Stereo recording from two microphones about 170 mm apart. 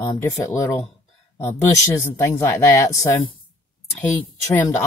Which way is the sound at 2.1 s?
15° left (ahead or behind).